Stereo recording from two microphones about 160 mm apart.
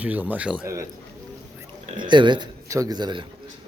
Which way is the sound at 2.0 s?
30° right (ahead or behind).